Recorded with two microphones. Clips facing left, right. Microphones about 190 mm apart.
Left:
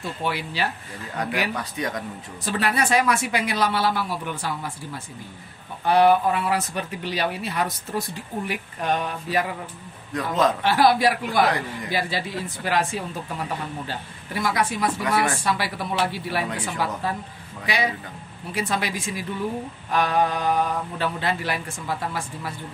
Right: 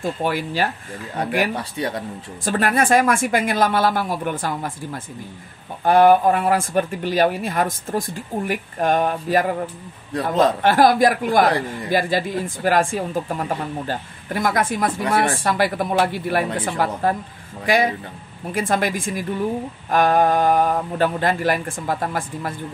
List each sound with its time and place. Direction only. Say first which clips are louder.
0.0 s speech: right 6 dB; 45° right (ahead or behind)
1.5 s speech: right 3 dB; 30° right (ahead or behind)
2.4 s speech: right 4 dB; 50° right (ahead or behind)
10.1 s a man's voice: right 4 dB; 30° right (ahead or behind)
10.6 s speech: right 4 dB; 45° right (ahead or behind)